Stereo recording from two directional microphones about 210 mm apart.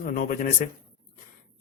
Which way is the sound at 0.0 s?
40° left (ahead or behind).